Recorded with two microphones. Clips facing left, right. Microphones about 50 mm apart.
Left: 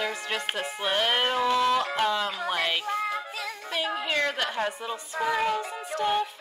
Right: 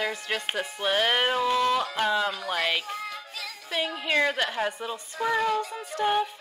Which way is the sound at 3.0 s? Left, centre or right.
Left.